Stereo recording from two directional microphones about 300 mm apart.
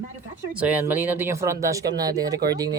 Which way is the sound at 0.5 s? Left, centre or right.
Centre.